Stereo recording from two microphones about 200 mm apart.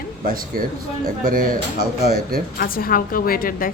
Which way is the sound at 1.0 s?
45° right (ahead or behind).